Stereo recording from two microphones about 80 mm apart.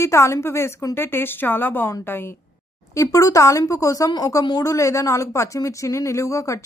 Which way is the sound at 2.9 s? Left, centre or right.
Left.